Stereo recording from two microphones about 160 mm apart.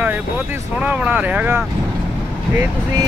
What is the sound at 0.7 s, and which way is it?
Speech, 10° right (ahead or behind).